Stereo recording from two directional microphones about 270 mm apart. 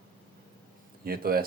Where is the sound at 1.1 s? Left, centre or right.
Right.